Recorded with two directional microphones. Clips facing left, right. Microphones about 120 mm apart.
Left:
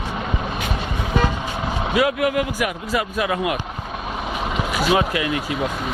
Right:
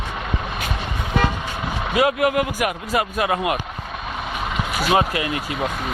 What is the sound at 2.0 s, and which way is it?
Speech, 50° right (ahead or behind).